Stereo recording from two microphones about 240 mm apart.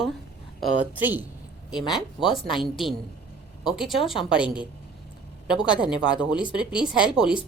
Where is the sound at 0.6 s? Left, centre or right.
Centre.